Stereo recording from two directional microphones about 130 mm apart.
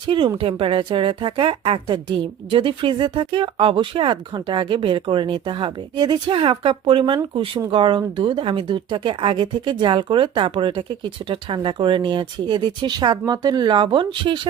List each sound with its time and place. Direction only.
0.0 s speech: 35° right (ahead or behind)